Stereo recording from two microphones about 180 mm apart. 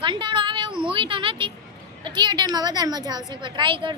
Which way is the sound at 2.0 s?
25° right (ahead or behind).